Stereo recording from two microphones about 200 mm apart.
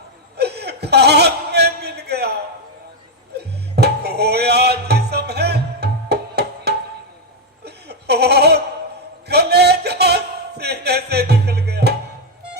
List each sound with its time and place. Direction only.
0.3 s chuckle: 55° right (ahead or behind)
3.3 s music: 55° right (ahead or behind)
7.6 s chuckle: 55° right (ahead or behind)
9.2 s a sound: 55° right (ahead or behind)